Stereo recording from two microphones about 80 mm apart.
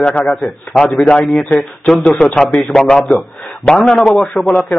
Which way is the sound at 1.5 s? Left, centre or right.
Left.